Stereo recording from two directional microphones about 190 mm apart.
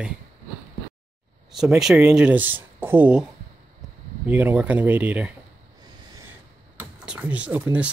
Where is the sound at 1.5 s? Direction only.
Centre (ahead or behind).